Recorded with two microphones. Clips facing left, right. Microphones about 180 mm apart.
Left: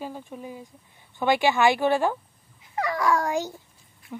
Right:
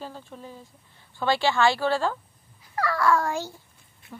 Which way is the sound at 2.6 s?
20° left (ahead or behind).